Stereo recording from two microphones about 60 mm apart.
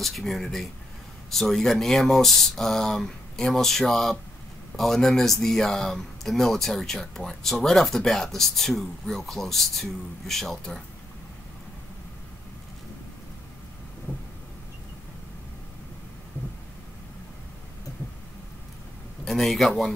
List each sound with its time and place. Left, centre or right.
0.0 s speech: centre
14.1 s vehicle: left
19.2 s a man's voice: centre